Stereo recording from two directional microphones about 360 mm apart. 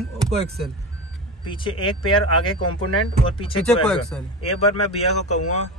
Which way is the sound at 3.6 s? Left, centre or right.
Centre.